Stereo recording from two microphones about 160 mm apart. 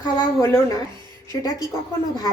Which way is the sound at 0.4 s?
15° left (ahead or behind).